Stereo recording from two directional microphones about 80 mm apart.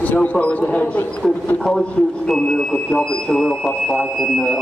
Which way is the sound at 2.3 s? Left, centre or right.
Centre.